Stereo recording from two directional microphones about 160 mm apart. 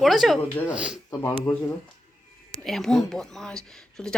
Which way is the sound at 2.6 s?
Centre (ahead or behind).